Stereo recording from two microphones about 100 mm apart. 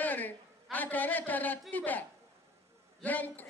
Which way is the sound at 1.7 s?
15° left (ahead or behind).